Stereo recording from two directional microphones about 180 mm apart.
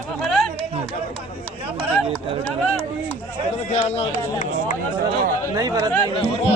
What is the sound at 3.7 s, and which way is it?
Speech, 35° left (ahead or behind).